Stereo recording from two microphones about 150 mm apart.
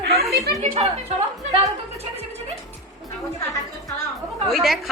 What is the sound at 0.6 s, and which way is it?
Speech, 45° right (ahead or behind).